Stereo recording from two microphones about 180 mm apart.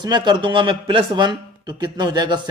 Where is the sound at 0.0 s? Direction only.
25° right (ahead or behind).